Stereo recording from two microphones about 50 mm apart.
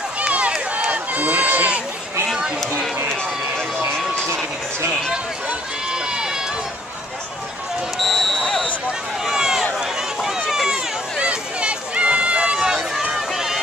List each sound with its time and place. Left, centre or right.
0.2 s run: right
8.0 s a sound: centre
9.2 s run: centre